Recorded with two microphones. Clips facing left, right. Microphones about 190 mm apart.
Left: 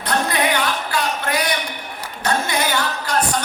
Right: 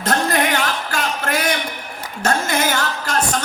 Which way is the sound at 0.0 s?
45° right (ahead or behind).